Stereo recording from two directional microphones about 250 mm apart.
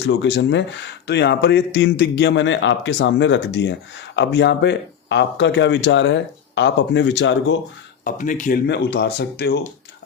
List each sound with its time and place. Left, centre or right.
0.0 s speech: left
8.0 s speech: left